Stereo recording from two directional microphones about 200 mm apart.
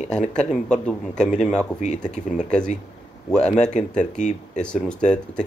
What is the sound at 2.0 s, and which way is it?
Speech, 35° left (ahead or behind).